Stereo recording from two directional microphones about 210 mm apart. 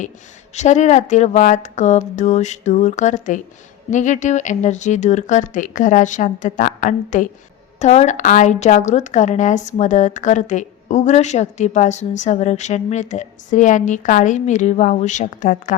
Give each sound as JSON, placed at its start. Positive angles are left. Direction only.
{"t": 0.5, "sound": "a woman's voice", "side_deg": 35}